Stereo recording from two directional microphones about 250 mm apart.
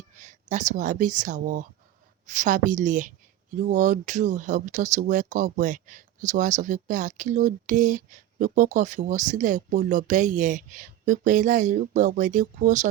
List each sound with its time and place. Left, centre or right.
0.2 s speech: right